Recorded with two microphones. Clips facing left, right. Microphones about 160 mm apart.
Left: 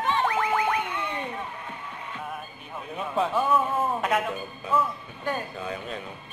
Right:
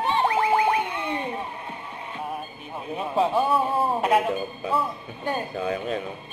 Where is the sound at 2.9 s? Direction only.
30° right (ahead or behind).